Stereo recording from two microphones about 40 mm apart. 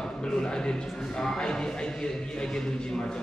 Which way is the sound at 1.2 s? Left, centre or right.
Centre.